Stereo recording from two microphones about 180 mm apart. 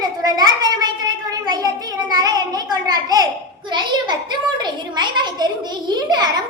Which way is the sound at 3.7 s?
25° right (ahead or behind).